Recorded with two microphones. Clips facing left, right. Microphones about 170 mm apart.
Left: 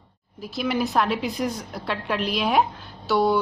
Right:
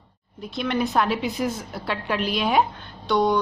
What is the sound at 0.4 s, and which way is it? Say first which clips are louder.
A woman's voice: even; 5° left (ahead or behind).